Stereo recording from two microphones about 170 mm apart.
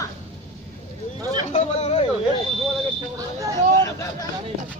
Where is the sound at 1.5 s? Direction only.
40° left (ahead or behind).